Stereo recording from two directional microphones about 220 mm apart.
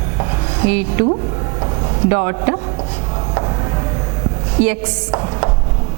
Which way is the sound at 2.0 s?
15° right (ahead or behind).